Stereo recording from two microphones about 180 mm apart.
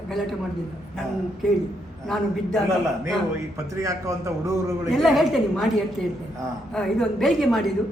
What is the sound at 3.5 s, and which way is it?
A man's voice, 15° right (ahead or behind).